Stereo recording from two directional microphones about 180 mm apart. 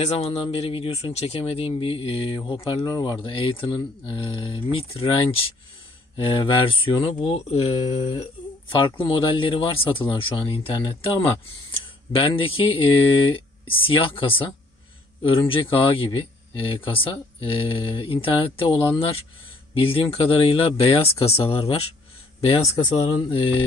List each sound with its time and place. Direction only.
0.3 s speech: 30° left (ahead or behind)
12.2 s speech: 30° left (ahead or behind)